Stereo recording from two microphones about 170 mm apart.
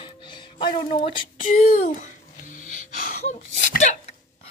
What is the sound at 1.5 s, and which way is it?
Speech, 45° left (ahead or behind).